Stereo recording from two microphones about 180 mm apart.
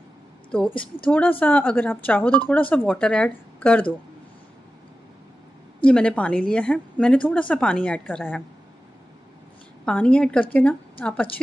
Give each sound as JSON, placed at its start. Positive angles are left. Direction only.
{"t": 0.5, "sound": "speech", "side_deg": 5}
{"t": 5.9, "sound": "a woman's voice", "side_deg": 5}
{"t": 9.8, "sound": "a woman's voice", "side_deg": 5}